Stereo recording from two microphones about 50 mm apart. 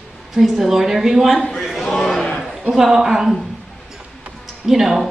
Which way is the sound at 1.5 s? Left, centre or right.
Centre.